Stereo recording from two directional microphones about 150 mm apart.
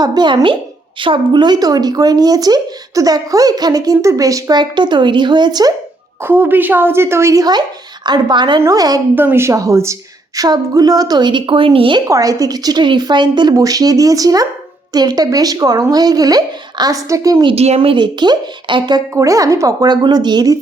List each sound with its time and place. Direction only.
0.0 s speech: 30° right (ahead or behind)
6.2 s a woman's voice: 15° right (ahead or behind); by 12.0 s 35° right (ahead or behind)
12.0 s speech: 20° right (ahead or behind)
17.4 s speech: 45° right (ahead or behind); by 20.6 s 25° right (ahead or behind)